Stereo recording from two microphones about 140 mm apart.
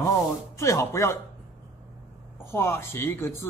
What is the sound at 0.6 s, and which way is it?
Speech, 20° left (ahead or behind).